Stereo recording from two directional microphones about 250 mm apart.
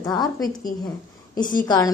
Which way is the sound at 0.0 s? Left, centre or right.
Centre.